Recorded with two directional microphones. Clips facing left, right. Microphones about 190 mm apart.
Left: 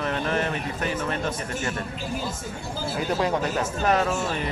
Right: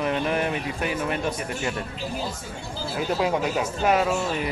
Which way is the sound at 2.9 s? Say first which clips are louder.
Right 1 dB; 5° right (ahead or behind).